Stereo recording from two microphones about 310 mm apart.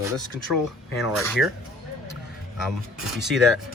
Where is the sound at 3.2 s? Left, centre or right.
Centre.